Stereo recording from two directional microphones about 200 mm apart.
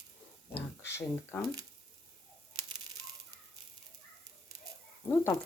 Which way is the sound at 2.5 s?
90° right.